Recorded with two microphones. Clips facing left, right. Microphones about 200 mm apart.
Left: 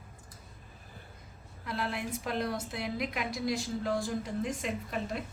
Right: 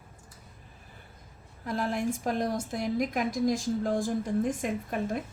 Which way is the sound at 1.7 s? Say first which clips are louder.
Right 6 dB; 45° right (ahead or behind).